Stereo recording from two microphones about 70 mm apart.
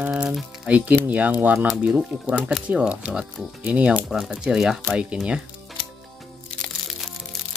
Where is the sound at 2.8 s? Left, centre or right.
Centre.